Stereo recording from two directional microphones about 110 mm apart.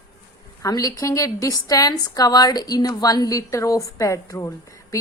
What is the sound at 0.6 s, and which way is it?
A woman's voice, 35° left (ahead or behind).